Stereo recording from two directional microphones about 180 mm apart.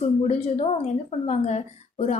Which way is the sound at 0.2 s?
35° left (ahead or behind).